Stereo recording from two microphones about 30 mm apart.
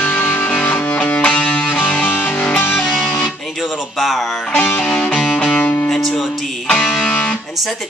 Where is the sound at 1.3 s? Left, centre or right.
Left.